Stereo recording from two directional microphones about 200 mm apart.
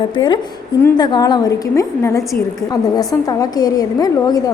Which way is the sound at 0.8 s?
20° left (ahead or behind).